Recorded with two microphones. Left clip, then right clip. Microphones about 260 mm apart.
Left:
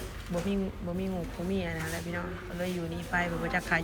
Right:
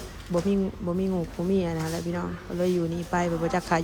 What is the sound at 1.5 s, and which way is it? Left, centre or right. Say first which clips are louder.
Speech: right 6 dB; right.